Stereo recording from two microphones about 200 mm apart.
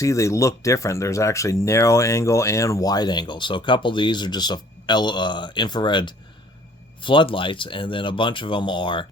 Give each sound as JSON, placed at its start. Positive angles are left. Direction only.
{"t": 0.0, "sound": "speech", "side_deg": 15}